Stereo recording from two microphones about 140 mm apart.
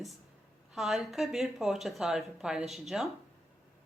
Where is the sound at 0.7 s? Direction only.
5° right (ahead or behind).